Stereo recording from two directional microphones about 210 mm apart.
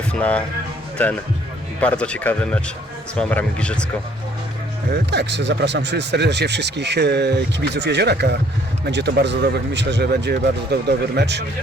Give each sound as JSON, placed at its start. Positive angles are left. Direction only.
{"t": 0.1, "sound": "speech", "side_deg": 5}
{"t": 5.1, "sound": "speech", "side_deg": -55}